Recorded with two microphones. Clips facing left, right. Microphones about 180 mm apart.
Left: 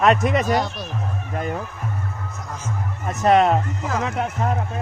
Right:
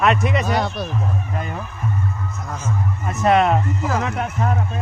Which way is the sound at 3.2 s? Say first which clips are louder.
Even; 35° left (ahead or behind).